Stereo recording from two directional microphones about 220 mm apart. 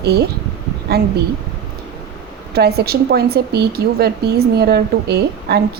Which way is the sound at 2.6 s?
45° right (ahead or behind).